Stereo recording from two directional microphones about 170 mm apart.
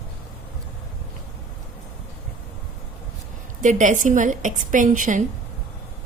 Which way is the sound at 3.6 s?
45° right (ahead or behind).